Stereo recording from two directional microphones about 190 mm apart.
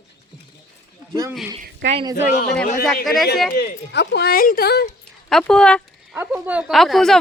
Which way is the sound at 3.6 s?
65° left (ahead or behind).